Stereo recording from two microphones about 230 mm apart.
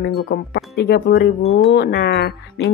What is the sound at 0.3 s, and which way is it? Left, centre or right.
Speech, left.